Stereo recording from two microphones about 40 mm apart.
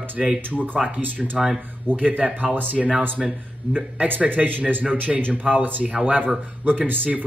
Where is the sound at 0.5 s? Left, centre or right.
Right.